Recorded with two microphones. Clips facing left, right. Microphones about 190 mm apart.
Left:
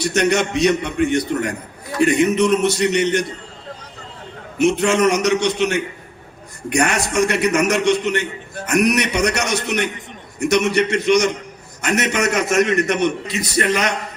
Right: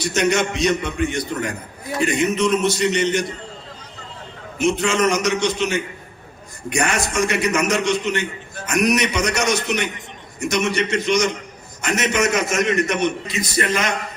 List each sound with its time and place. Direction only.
0.0 s a man's voice: 65° left (ahead or behind)
4.5 s a man's voice: 65° left (ahead or behind)